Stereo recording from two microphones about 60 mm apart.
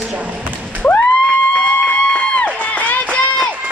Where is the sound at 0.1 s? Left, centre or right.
Right.